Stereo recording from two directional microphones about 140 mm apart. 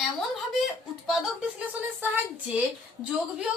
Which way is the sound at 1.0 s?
5° right (ahead or behind).